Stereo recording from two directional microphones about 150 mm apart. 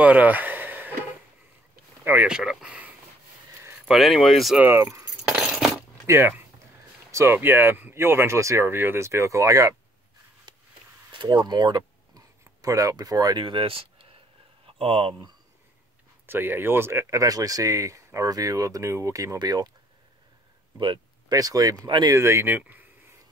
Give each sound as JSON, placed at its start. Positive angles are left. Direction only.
{"t": 0.0, "sound": "a sound", "side_deg": -10}
{"t": 2.0, "sound": "speech", "side_deg": -10}
{"t": 4.6, "sound": "speech", "side_deg": -15}
{"t": 5.3, "sound": "coin", "side_deg": -5}
{"t": 6.0, "sound": "speech", "side_deg": -15}
{"t": 10.5, "sound": "a sound", "side_deg": -30}
{"t": 11.1, "sound": "speech", "side_deg": -30}
{"t": 16.3, "sound": "speech", "side_deg": -15}
{"t": 20.8, "sound": "speech", "side_deg": -30}
{"t": 22.6, "sound": "a sound", "side_deg": -10}